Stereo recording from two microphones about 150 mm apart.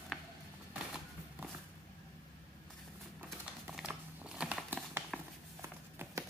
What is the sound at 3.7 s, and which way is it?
Crumpling, 5° right (ahead or behind).